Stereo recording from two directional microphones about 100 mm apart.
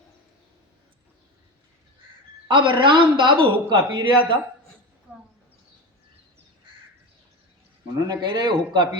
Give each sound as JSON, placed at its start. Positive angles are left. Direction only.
{"t": 2.5, "sound": "a man's voice", "side_deg": -55}
{"t": 7.9, "sound": "speech", "side_deg": -40}